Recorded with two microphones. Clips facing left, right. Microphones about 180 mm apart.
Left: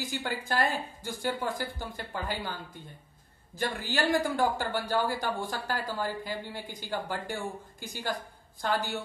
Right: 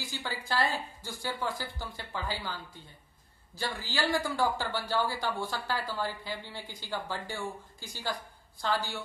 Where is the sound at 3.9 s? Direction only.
45° left (ahead or behind).